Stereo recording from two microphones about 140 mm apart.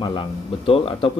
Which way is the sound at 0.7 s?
40° left (ahead or behind).